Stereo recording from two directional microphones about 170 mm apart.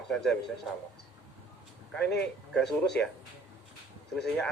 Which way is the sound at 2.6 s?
80° left.